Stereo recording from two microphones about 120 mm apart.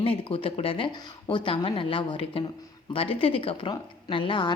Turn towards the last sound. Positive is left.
turn(degrees=45)  # may be behind; listen again after turning